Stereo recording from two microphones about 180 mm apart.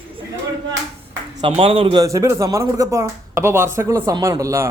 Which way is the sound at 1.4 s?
30° right (ahead or behind).